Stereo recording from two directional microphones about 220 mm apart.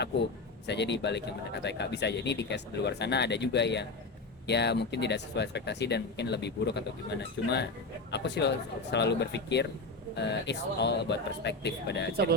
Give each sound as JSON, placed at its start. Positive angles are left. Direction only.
{"t": 0.7, "sound": "speech", "side_deg": 50}